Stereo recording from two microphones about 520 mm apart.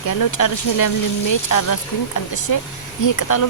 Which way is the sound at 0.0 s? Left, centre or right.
Left.